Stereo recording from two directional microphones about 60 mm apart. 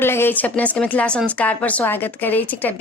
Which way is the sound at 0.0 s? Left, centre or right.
Left.